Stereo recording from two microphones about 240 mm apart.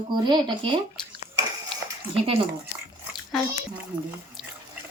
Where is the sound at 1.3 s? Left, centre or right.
Right.